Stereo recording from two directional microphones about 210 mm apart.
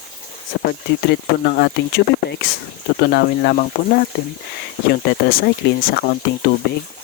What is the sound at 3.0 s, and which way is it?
Speech, 50° left (ahead or behind).